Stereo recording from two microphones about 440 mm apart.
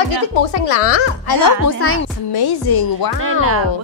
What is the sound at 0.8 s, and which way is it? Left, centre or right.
Speech, left.